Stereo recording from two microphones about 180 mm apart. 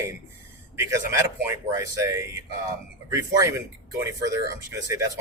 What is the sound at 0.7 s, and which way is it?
Speech, 15° right (ahead or behind).